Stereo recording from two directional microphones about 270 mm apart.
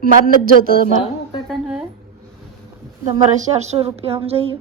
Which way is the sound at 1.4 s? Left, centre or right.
Centre.